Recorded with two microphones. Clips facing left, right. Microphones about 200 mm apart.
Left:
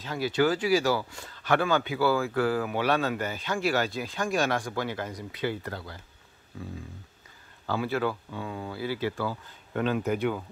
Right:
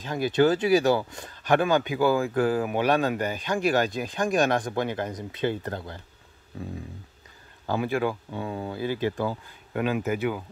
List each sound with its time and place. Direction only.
0.0 s speech: 20° right (ahead or behind)
7.6 s speech: 15° right (ahead or behind)